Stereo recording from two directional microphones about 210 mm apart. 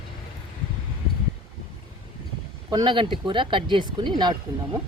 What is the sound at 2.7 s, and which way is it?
Speech, 20° right (ahead or behind).